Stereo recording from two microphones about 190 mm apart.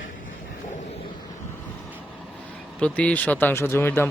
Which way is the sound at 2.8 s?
5° left (ahead or behind).